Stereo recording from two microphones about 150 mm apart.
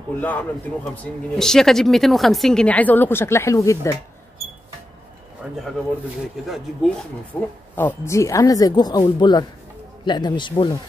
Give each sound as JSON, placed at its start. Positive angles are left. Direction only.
{"t": 0.2, "sound": "a man's voice", "side_deg": 10}
{"t": 5.4, "sound": "pigeon", "side_deg": -5}
{"t": 6.4, "sound": "speech", "side_deg": 0}
{"t": 7.3, "sound": "a woman's voice", "side_deg": 10}